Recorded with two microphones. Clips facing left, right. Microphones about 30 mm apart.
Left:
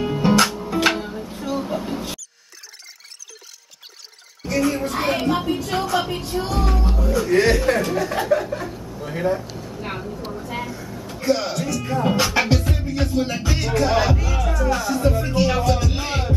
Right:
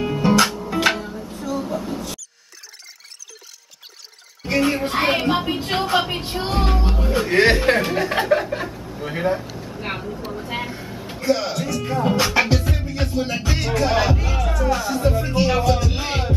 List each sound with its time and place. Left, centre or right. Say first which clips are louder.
0.0 s music: even; centre
0.9 s music: left 1 dB; centre
1.9 s mouse: left 1 dB; left
4.5 s speech: right 1 dB; right
9.8 s vehicle: right 2 dB; right
10.4 s a sound: right 1 dB; right
11.2 s speech: even; centre